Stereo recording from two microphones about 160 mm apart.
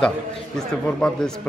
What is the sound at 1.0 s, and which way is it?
Speech, 5° left (ahead or behind).